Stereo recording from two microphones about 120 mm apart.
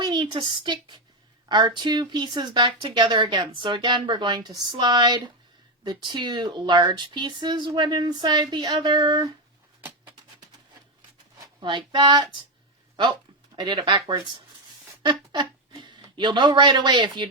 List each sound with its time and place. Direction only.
0.0 s a sound: 40° right (ahead or behind)
0.3 s speech: 40° right (ahead or behind)
11.6 s speech: 40° right (ahead or behind)
13.6 s speech: 40° right (ahead or behind)